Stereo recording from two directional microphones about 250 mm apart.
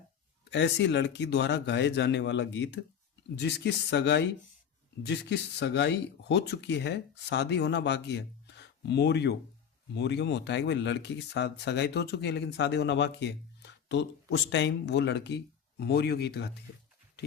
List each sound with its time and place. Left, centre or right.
0.5 s speech: left